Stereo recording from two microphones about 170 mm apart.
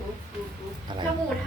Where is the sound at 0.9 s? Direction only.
25° right (ahead or behind).